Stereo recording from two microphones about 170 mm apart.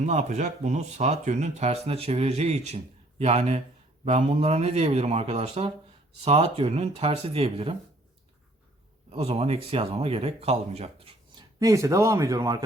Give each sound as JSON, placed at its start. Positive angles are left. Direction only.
{"t": 0.0, "sound": "speech", "side_deg": -45}
{"t": 9.0, "sound": "speech", "side_deg": -35}
{"t": 11.3, "sound": "a man's voice", "side_deg": -20}